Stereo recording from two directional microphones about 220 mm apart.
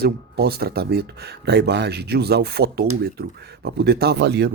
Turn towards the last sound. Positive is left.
turn(degrees=-50)  # may be behind; listen again after turning